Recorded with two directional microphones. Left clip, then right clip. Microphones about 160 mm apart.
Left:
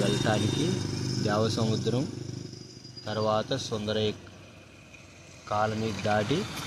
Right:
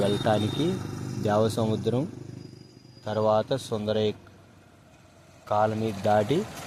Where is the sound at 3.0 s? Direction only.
90° right.